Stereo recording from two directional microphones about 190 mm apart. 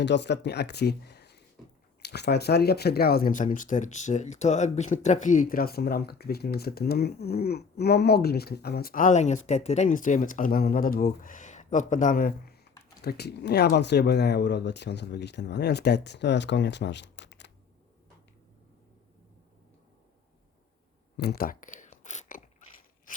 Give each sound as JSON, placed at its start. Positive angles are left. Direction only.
{"t": 0.0, "sound": "speech", "side_deg": 65}
{"t": 21.2, "sound": "a sound", "side_deg": 55}
{"t": 23.1, "sound": "scissors", "side_deg": 45}